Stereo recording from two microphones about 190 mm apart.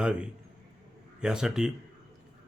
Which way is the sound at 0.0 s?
5° right (ahead or behind).